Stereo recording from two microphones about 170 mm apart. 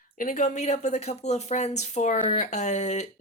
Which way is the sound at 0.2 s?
50° left (ahead or behind).